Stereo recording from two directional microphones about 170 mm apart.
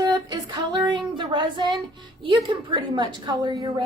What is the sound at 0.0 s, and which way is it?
Female singing, 25° right (ahead or behind).